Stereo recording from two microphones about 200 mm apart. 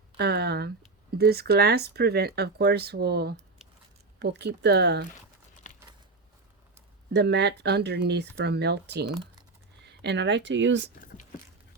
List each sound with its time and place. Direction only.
0.2 s speech: 55° right (ahead or behind)
5.7 s a sound: 40° left (ahead or behind)
7.1 s speech: 60° right (ahead or behind)